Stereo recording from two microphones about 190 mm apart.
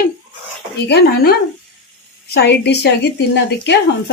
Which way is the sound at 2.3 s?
60° left (ahead or behind).